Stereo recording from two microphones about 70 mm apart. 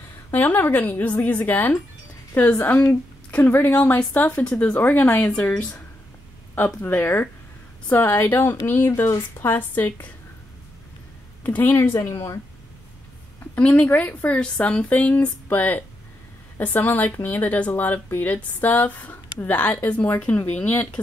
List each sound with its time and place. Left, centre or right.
0.3 s a woman's voice: left
11.4 s a woman's voice: left
13.6 s speech: left